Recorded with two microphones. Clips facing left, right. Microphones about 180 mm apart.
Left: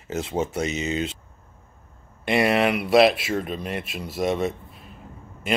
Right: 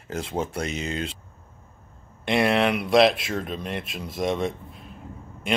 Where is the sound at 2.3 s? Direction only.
5° left (ahead or behind).